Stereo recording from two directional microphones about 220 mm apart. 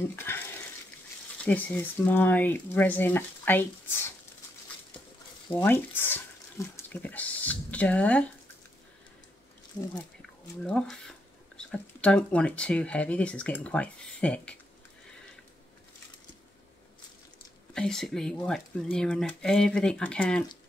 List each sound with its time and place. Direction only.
0.1 s speech: 10° left (ahead or behind)
1.4 s speech: 5° left (ahead or behind)
5.6 s speech: 10° left (ahead or behind)
10.6 s speech: 5° left (ahead or behind)
17.7 s speech: centre (ahead or behind)